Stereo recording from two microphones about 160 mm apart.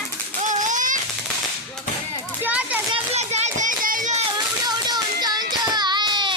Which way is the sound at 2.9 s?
45° right (ahead or behind).